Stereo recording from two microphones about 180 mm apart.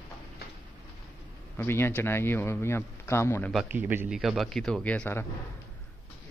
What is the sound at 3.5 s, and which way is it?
A man's voice, 10° right (ahead or behind).